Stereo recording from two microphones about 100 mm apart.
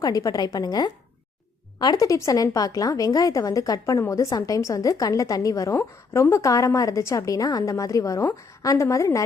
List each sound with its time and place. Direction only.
0.0 s a woman's voice: 40° left (ahead or behind)
5.7 s a woman's voice: 20° left (ahead or behind)
6.3 s a woman's voice: 30° left (ahead or behind)